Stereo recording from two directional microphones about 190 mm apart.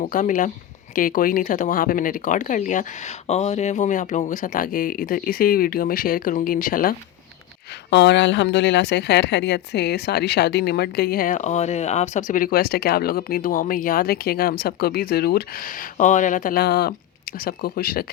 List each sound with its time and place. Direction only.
0.0 s speech: 40° left (ahead or behind)
7.9 s speech: 65° left (ahead or behind)